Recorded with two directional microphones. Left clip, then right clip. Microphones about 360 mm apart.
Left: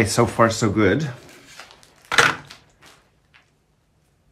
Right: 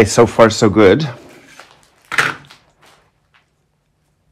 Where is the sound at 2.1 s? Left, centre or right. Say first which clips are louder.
Even; centre.